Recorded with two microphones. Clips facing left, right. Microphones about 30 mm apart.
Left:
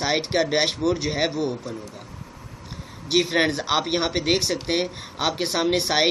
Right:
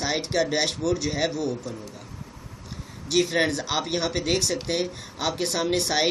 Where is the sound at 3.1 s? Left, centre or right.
Left.